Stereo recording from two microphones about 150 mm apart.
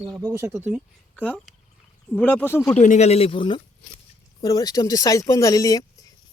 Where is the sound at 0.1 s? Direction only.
20° right (ahead or behind).